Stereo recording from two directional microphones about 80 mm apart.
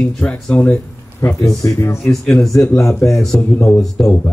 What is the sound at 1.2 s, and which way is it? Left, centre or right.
Speech, left.